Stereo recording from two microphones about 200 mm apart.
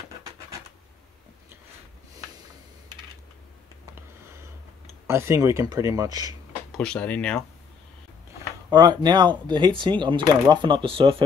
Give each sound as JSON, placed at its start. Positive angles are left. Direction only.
{"t": 5.0, "sound": "speech", "side_deg": -15}
{"t": 6.7, "sound": "speech", "side_deg": 5}
{"t": 8.6, "sound": "speech", "side_deg": -20}